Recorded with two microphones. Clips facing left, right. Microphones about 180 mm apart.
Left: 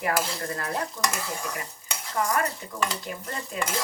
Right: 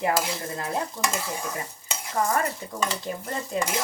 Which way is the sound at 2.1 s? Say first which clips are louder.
Right 1 dB; 30° right (ahead or behind).